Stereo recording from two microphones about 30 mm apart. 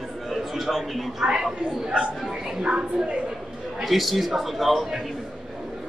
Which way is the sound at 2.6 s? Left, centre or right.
Right.